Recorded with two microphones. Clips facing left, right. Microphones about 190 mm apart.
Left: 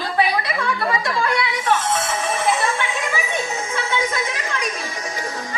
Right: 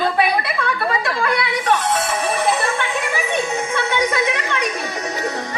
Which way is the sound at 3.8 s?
60° right (ahead or behind).